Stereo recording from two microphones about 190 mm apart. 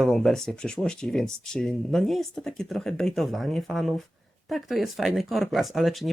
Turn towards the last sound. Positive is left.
turn(degrees=0)  # may be behind; listen again after turning